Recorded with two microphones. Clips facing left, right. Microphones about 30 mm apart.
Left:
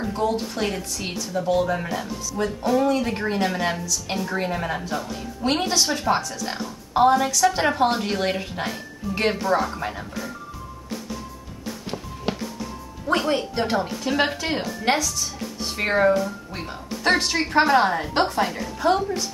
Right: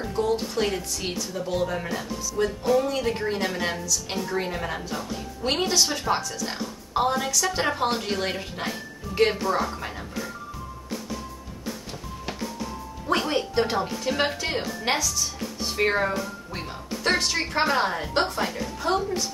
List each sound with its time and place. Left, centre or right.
0.0 s a woman's voice: centre
12.3 s music: left
13.1 s a woman's voice: centre